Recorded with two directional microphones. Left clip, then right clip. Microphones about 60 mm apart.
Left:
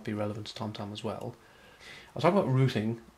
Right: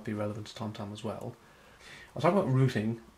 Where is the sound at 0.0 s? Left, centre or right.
Left.